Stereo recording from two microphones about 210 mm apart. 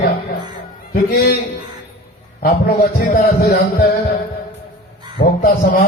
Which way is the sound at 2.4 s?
40° left (ahead or behind).